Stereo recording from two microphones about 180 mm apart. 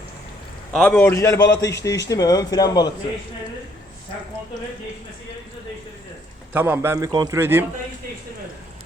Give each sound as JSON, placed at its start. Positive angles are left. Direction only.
{"t": 0.7, "sound": "a man's voice", "side_deg": 5}
{"t": 6.5, "sound": "a man's voice", "side_deg": -10}